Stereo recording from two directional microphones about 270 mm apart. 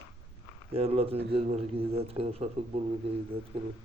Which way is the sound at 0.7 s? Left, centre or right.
Right.